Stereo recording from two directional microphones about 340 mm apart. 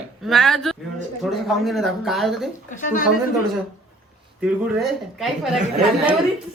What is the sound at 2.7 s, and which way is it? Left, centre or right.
Speech, left.